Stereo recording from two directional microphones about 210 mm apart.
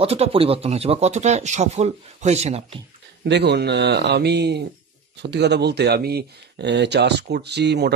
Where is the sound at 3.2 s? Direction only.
55° right (ahead or behind).